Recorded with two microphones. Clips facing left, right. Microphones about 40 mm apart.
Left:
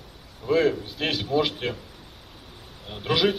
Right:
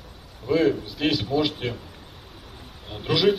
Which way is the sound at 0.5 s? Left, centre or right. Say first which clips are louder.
Right 1 dB; centre.